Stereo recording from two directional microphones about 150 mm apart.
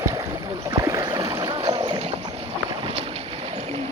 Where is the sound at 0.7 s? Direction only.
25° right (ahead or behind).